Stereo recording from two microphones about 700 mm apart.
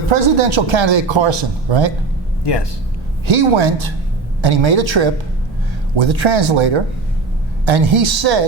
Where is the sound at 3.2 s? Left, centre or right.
Right.